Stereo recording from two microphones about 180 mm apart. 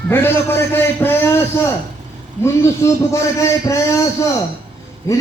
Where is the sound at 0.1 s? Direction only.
10° left (ahead or behind).